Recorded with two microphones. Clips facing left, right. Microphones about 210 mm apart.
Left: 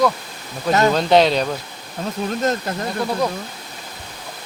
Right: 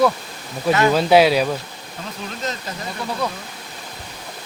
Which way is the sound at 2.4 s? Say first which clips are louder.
Left 7 dB; 50° left (ahead or behind).